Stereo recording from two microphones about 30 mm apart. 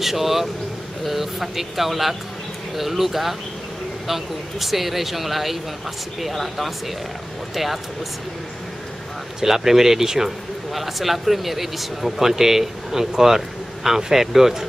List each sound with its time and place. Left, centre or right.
0.0 s speech: centre
9.4 s speech: centre